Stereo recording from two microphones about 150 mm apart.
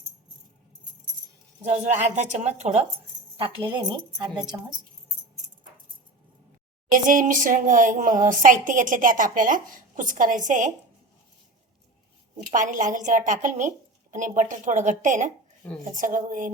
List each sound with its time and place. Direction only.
1.6 s speech: 50° right (ahead or behind)
3.3 s speech: 35° right (ahead or behind)
6.9 s speech: 60° right (ahead or behind)
12.5 s speech: 60° right (ahead or behind)